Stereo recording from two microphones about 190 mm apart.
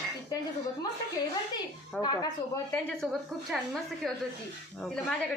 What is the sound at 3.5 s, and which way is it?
Speech, 5° right (ahead or behind).